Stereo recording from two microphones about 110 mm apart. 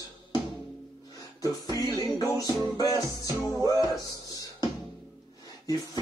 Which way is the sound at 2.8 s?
35° left (ahead or behind).